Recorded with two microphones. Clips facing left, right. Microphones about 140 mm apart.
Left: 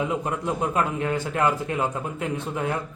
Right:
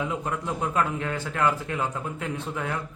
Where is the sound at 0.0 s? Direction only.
15° left (ahead or behind).